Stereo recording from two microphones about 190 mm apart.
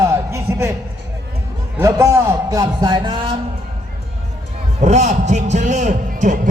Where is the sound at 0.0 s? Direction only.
15° right (ahead or behind).